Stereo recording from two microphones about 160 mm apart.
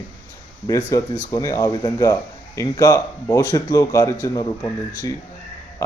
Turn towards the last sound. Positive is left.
turn(degrees=20)  # may be behind; listen again after turning